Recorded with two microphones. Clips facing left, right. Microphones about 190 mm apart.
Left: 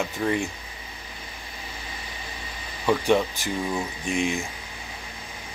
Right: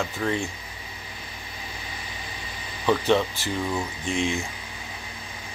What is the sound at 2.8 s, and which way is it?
Speech, 10° left (ahead or behind).